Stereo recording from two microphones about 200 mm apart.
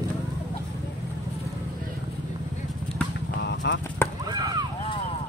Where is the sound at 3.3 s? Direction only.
60° left (ahead or behind).